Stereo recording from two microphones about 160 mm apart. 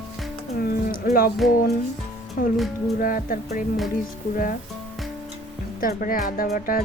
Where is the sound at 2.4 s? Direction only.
65° left (ahead or behind).